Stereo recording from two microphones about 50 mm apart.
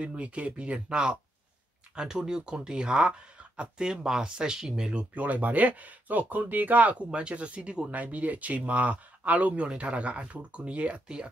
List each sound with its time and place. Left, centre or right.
0.0 s speech: right
5.1 s speech: right
7.1 s speech: right